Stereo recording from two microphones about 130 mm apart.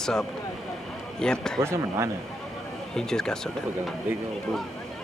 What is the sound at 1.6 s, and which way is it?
Speech, 20° right (ahead or behind).